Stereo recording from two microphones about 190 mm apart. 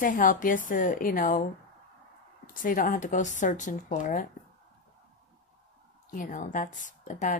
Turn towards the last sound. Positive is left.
turn(degrees=40)  # may be behind; listen again after turning